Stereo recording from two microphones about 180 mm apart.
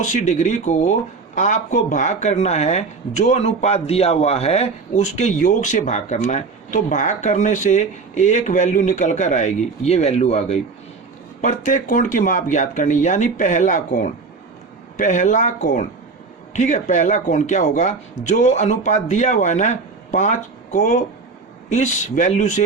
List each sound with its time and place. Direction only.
0.0 s speech: 45° left (ahead or behind)